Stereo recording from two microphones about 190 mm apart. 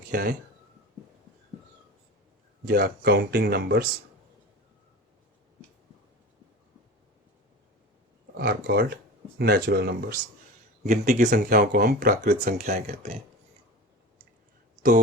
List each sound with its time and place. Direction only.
0.1 s speech: 55° right (ahead or behind)
2.6 s speech: 55° right (ahead or behind)
8.4 s speech: 60° right (ahead or behind)
10.8 s speech: 40° right (ahead or behind)